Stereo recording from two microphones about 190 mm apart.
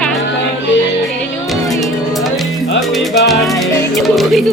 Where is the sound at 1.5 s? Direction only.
Centre (ahead or behind).